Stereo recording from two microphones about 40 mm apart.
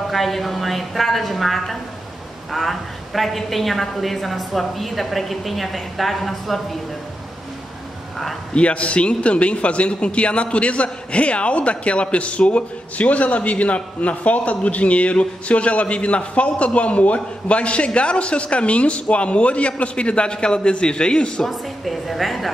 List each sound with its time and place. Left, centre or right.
0.1 s a woman's voice: centre
8.5 s a man's voice: left
21.5 s a woman's voice: centre